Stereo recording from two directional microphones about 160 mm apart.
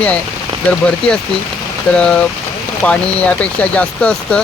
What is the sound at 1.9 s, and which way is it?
Speech, 5° left (ahead or behind).